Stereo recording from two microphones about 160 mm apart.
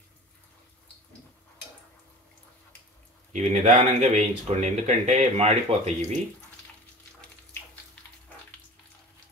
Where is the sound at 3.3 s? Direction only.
50° right (ahead or behind).